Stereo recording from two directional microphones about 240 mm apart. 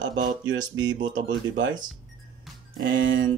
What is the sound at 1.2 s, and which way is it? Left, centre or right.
Speech, right.